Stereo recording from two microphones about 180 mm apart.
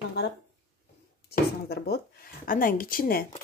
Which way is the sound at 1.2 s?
65° left (ahead or behind).